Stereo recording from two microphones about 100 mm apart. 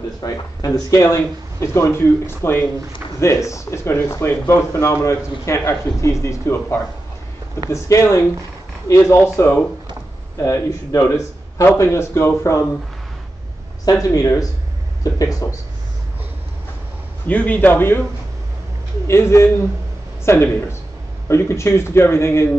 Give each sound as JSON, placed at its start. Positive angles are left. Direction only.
{"t": 0.2, "sound": "speech", "side_deg": 40}
{"t": 10.4, "sound": "speech", "side_deg": 30}
{"t": 14.1, "sound": "speech", "side_deg": 35}
{"t": 17.3, "sound": "speech", "side_deg": 15}
{"t": 19.0, "sound": "speech", "side_deg": 25}